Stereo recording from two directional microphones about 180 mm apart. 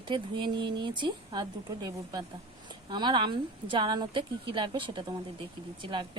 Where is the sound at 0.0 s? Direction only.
25° right (ahead or behind).